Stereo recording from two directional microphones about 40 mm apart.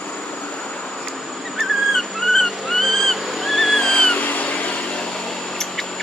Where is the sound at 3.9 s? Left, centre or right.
Left.